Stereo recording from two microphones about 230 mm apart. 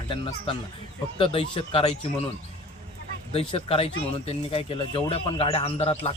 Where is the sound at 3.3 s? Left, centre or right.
Left.